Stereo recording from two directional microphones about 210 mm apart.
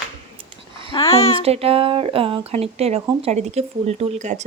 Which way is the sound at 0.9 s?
20° left (ahead or behind).